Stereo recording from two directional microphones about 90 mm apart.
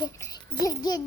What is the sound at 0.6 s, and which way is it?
Speech, 45° left (ahead or behind).